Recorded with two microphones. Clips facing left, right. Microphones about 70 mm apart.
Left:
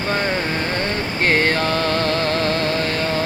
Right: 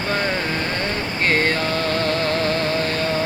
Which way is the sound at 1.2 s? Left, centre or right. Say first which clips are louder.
Left 2 dB; left.